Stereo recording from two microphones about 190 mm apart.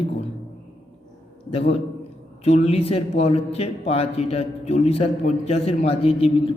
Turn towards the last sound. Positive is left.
turn(degrees=30)  # may be behind; listen again after turning